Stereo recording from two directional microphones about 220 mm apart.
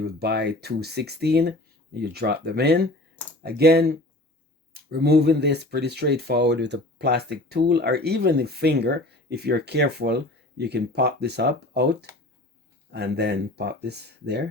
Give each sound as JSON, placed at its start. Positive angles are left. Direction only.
{"t": 0.0, "sound": "speech", "side_deg": -45}